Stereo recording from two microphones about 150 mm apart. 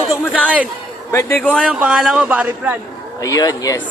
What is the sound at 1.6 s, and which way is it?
Speech, 5° right (ahead or behind).